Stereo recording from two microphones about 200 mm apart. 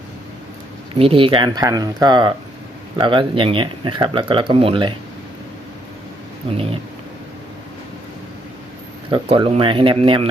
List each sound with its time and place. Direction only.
0.9 s speech: 25° right (ahead or behind)
9.0 s speech: 25° right (ahead or behind)